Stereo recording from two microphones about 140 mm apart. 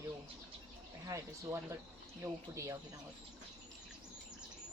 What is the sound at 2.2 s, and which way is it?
Speech, 20° right (ahead or behind).